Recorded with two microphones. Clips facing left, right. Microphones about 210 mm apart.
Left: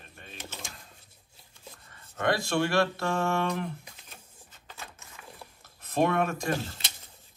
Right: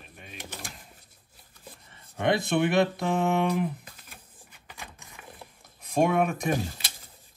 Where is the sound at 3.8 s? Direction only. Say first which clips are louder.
Right 1 dB; 10° right (ahead or behind).